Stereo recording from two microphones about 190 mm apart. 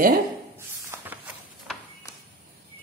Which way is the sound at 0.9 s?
10° right (ahead or behind).